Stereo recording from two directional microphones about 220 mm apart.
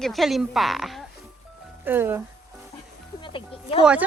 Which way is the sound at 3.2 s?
25° left (ahead or behind).